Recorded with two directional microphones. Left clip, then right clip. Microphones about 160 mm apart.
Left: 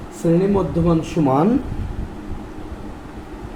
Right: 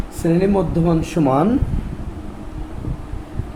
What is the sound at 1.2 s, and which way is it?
Speech, 55° right (ahead or behind).